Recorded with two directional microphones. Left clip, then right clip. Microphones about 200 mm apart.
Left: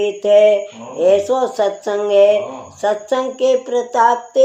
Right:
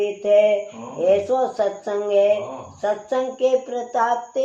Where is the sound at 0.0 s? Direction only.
50° left (ahead or behind).